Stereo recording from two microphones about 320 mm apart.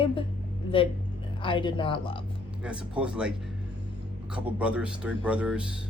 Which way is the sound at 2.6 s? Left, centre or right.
Centre.